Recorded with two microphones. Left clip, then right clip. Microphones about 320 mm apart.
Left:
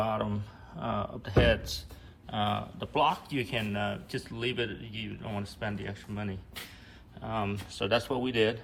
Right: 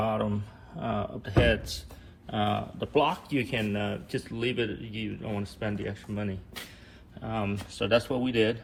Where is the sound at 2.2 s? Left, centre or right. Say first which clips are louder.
Right 2 dB; centre.